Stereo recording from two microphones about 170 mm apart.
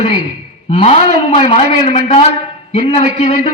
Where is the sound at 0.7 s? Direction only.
35° left (ahead or behind).